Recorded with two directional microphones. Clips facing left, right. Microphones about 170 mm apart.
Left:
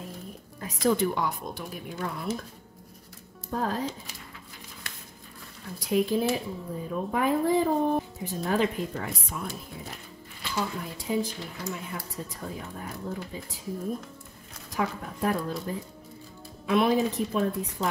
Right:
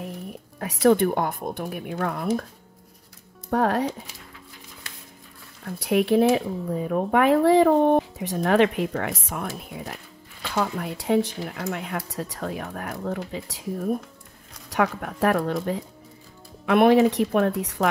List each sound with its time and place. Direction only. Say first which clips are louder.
0.6 s speech: right 6 dB; 70° right (ahead or behind)
3.4 s speech: right 7 dB; 70° right (ahead or behind)
5.7 s speech: right 5 dB; 65° right (ahead or behind)
10.4 s speech: right 5 dB; 65° right (ahead or behind)
16.6 s speech: right 7 dB; 65° right (ahead or behind); by 17.8 s 80° right